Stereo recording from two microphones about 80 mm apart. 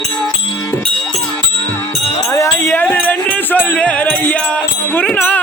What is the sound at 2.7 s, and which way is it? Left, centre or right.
Music, left.